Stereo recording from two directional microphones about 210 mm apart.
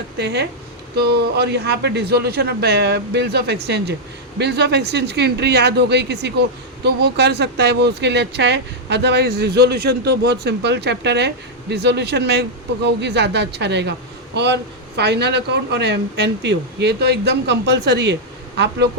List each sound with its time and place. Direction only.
0.2 s a man's voice: 55° right (ahead or behind)